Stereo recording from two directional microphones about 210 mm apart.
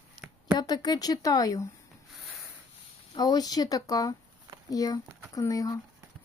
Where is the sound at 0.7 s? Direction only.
20° left (ahead or behind).